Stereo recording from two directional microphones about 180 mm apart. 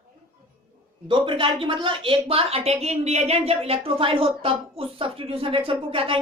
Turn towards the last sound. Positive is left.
turn(degrees=-30)  # may be behind; listen again after turning